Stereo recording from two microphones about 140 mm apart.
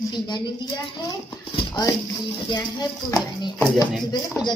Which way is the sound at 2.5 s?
30° left (ahead or behind).